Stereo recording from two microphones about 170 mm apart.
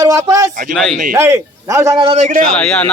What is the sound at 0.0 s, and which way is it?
Speech, 20° right (ahead or behind).